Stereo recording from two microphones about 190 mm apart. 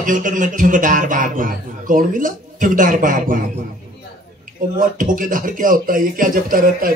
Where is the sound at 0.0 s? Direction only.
45° right (ahead or behind).